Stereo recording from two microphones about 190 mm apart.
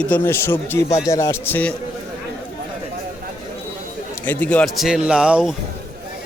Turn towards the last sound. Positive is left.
turn(degrees=-5)  # may be behind; listen again after turning